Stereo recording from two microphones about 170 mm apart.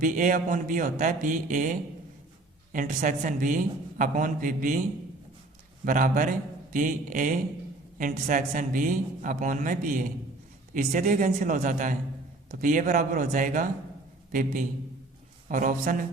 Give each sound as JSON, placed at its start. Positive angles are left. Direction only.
{"t": 0.0, "sound": "a man's voice", "side_deg": -50}
{"t": 2.7, "sound": "a man's voice", "side_deg": -50}
{"t": 15.4, "sound": "a man's voice", "side_deg": -50}